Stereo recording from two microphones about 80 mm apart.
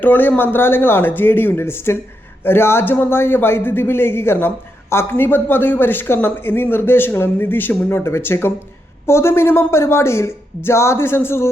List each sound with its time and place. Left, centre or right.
0.0 s speech: left